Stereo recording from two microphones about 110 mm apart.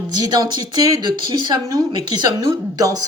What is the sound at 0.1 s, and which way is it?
A woman's voice, 35° right (ahead or behind).